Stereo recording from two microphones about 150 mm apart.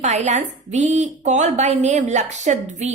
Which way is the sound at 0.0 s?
50° right (ahead or behind).